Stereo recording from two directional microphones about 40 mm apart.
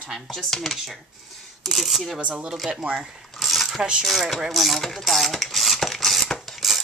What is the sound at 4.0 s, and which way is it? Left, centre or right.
Speech, centre.